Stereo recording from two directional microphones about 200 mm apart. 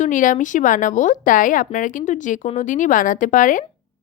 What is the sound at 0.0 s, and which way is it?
Speech, 40° left (ahead or behind).